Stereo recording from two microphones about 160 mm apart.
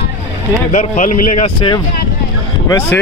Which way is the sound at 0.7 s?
50° left (ahead or behind).